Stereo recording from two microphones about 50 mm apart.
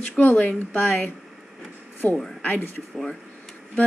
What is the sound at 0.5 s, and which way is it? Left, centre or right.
Speech, left.